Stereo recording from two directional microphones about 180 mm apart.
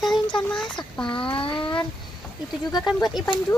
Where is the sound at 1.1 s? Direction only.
30° left (ahead or behind).